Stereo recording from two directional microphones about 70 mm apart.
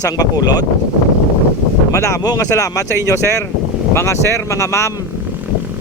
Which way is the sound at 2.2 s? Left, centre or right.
Left.